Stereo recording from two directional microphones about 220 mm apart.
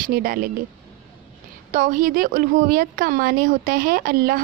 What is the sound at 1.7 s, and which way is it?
Speech, 35° right (ahead or behind).